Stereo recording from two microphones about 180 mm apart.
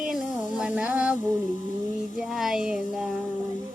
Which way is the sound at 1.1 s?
45° left (ahead or behind).